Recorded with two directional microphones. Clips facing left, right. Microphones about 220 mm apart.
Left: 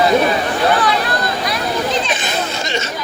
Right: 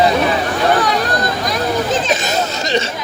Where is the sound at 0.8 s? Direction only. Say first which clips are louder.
Right 1 dB; 45° right (ahead or behind).